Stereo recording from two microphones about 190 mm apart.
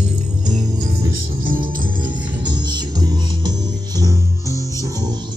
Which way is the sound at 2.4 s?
25° right (ahead or behind).